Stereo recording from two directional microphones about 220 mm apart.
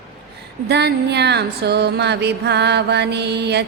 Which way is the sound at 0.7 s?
50° right (ahead or behind).